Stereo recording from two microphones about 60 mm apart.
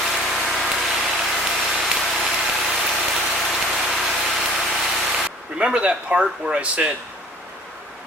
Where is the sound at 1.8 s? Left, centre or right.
Centre.